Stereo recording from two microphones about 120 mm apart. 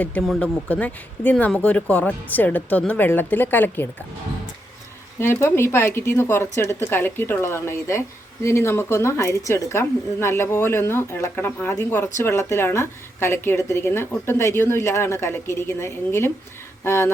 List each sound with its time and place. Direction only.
0.0 s speech: 15° left (ahead or behind)
5.2 s a woman's voice: 20° left (ahead or behind)